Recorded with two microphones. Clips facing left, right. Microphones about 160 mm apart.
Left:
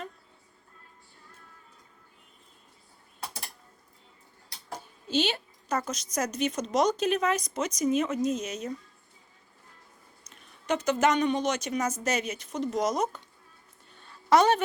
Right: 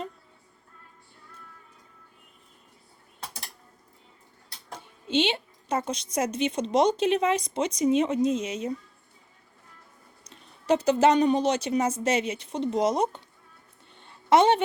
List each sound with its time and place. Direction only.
5.0 s speech: 25° right (ahead or behind)
10.2 s speech: 30° right (ahead or behind)
13.9 s a sound: 25° right (ahead or behind)